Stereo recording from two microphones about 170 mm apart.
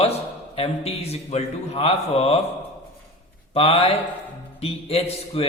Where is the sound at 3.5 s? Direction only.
35° left (ahead or behind).